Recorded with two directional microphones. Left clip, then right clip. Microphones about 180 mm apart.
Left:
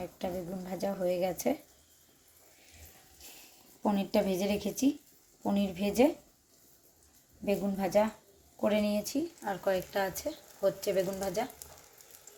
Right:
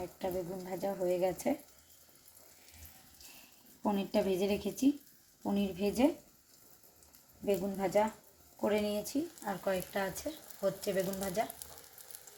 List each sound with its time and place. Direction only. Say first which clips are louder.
0.2 s a woman's voice: right 1 dB; 20° left (ahead or behind)
3.8 s speech: left 2 dB; 20° left (ahead or behind)
7.4 s speech: left 1 dB; 15° left (ahead or behind)